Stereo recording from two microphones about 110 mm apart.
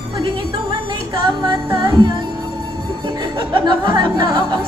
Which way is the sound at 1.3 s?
40° right (ahead or behind).